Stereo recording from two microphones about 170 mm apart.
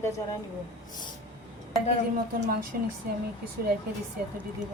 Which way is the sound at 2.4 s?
55° right (ahead or behind).